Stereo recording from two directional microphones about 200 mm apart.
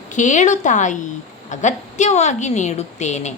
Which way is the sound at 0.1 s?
40° left (ahead or behind).